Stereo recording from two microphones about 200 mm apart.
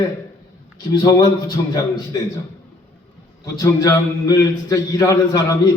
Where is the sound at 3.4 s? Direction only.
15° left (ahead or behind).